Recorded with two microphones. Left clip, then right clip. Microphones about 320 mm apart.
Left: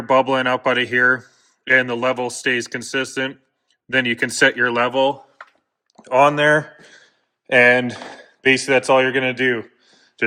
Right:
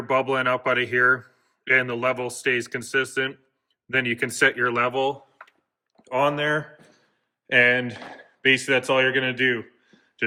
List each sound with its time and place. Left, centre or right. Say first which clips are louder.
0.0 s speech: left 6 dB; centre